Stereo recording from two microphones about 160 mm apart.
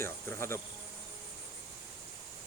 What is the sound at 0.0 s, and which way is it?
Cricket, 15° left (ahead or behind).